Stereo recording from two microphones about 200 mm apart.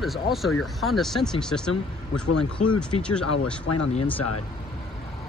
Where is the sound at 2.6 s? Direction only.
35° left (ahead or behind).